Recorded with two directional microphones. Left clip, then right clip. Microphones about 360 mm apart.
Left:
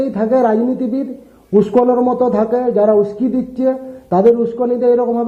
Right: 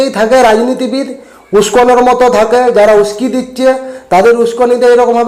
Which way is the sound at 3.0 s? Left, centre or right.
Centre.